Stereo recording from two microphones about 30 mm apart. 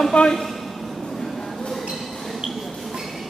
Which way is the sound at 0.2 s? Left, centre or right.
Left.